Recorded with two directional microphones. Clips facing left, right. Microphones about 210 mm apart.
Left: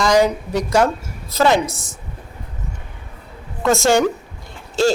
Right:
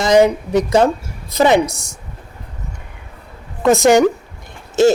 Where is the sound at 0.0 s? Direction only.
20° right (ahead or behind).